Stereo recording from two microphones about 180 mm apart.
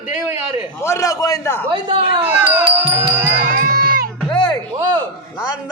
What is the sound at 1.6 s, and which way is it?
Speech, 30° right (ahead or behind).